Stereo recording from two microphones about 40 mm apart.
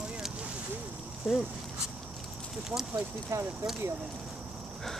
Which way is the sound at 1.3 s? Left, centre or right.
Centre.